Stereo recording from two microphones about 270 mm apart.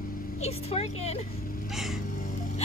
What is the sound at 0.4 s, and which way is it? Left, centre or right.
Speech, left.